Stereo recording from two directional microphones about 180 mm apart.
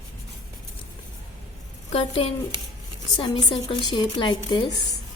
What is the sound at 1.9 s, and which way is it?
A woman's voice, 30° left (ahead or behind).